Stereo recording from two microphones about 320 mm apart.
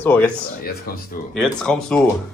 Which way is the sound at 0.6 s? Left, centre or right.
Left.